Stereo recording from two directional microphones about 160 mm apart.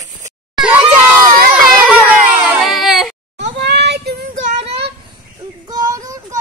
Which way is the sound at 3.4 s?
90° right.